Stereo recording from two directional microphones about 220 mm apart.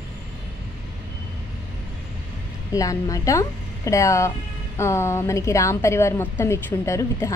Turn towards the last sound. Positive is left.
turn(degrees=15)  # may be behind; listen again after turning